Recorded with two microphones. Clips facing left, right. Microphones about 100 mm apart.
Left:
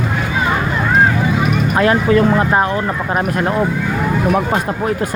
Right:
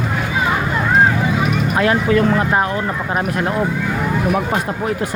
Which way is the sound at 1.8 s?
35° left (ahead or behind).